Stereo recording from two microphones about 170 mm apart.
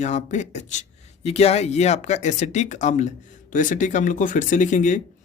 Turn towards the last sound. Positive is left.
turn(degrees=50)  # may be behind; listen again after turning